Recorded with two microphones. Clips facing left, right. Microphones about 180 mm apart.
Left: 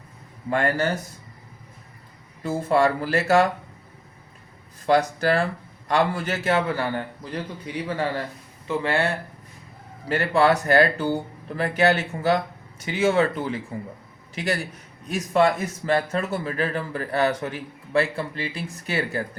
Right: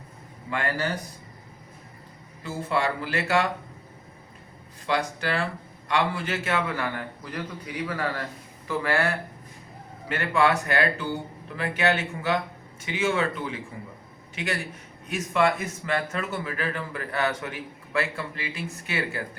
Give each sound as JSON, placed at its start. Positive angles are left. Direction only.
{"t": 0.5, "sound": "speech", "side_deg": 45}
{"t": 2.4, "sound": "speech", "side_deg": 45}
{"t": 4.9, "sound": "speech", "side_deg": 40}
{"t": 10.1, "sound": "speech", "side_deg": 35}